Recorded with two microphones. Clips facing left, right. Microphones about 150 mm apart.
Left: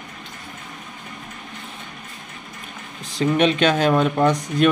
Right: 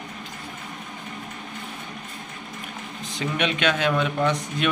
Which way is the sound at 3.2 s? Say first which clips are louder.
Left 8 dB; 35° left (ahead or behind).